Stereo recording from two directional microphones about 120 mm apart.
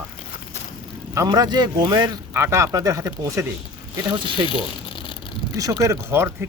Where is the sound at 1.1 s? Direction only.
30° right (ahead or behind).